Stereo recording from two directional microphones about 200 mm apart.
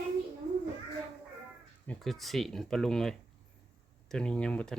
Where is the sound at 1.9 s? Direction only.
Centre (ahead or behind).